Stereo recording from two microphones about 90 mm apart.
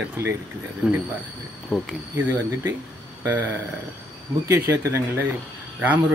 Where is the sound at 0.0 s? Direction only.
25° right (ahead or behind).